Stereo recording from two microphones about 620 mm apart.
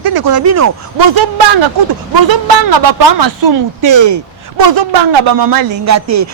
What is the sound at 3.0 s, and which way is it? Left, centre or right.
Speech, right.